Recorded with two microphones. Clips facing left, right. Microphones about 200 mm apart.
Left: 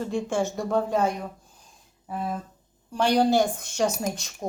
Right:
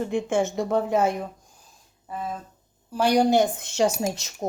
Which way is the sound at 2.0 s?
Centre (ahead or behind).